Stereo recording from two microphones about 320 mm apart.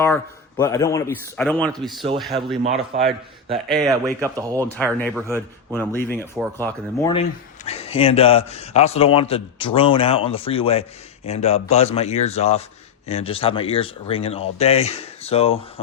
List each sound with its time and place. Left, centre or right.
0.0 s speech: centre
2.6 s a man's voice: centre
4.7 s speech: centre